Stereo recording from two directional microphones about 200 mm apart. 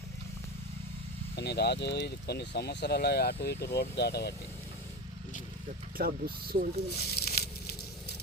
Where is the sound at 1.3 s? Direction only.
55° left (ahead or behind).